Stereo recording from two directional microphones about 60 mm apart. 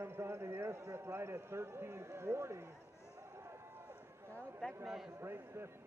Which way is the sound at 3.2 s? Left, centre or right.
Right.